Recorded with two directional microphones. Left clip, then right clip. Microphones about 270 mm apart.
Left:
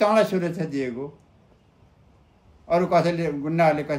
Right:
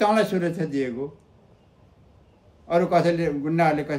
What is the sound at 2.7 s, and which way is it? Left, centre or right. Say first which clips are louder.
A man's voice: even; centre.